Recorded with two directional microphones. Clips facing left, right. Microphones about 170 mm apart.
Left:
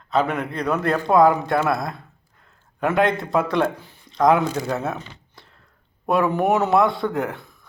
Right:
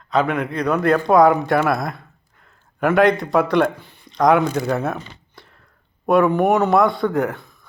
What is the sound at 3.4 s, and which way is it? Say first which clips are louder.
A man's voice: right 1 dB; 70° right (ahead or behind).